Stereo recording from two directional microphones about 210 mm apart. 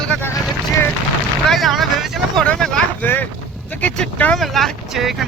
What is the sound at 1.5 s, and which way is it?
Vehicle, centre (ahead or behind).